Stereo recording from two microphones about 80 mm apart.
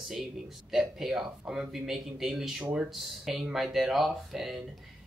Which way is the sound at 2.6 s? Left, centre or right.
Centre.